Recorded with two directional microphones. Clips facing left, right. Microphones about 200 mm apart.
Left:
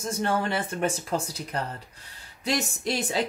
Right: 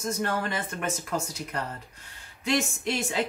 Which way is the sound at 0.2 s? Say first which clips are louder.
Left 7 dB; 30° left (ahead or behind).